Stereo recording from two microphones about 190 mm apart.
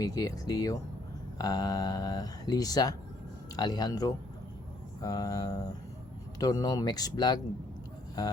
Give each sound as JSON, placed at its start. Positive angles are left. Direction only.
{"t": 0.0, "sound": "speech", "side_deg": 20}